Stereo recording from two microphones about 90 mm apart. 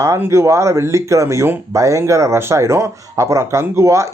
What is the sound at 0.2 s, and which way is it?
Speech, 30° right (ahead or behind).